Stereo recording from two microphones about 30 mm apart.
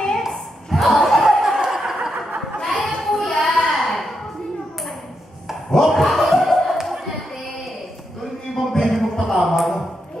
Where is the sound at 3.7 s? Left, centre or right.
Centre.